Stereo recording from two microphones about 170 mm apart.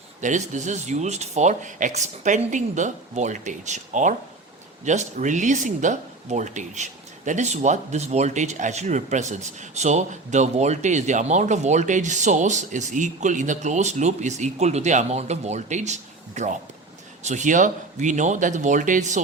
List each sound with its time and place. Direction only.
0.2 s speech: 45° right (ahead or behind)